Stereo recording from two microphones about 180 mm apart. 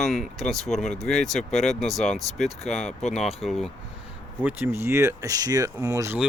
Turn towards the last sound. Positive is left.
turn(degrees=-15)  # may be behind; listen again after turning